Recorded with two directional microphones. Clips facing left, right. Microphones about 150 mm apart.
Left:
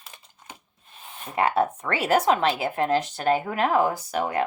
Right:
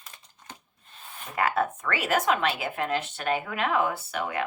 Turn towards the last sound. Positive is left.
turn(degrees=40)  # may be behind; listen again after turning